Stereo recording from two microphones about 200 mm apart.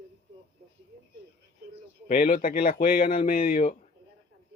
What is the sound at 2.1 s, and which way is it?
Speech, 45° left (ahead or behind).